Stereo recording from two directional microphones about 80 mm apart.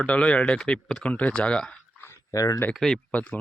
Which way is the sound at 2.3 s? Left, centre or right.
Left.